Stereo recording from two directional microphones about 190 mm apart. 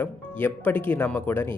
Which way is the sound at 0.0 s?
10° left (ahead or behind).